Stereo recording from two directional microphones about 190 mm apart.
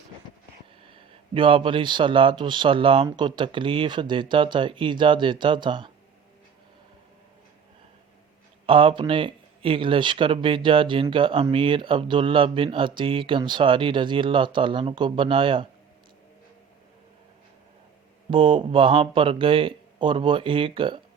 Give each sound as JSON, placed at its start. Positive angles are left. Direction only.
{"t": 0.9, "sound": "a man's voice", "side_deg": -25}
{"t": 8.6, "sound": "a man's voice", "side_deg": -30}
{"t": 18.3, "sound": "a man's voice", "side_deg": -25}